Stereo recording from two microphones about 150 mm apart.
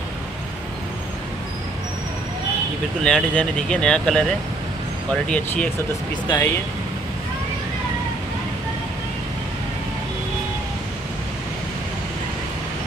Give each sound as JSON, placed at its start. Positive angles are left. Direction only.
{"t": 3.0, "sound": "speech", "side_deg": 5}
{"t": 5.3, "sound": "speech", "side_deg": 10}
{"t": 6.2, "sound": "speech", "side_deg": 25}